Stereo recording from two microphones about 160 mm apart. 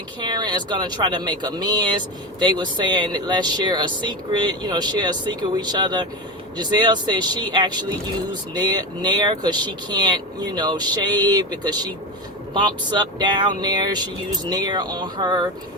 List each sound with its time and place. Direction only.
0.2 s speech: 25° right (ahead or behind)
13.1 s speech: 25° right (ahead or behind)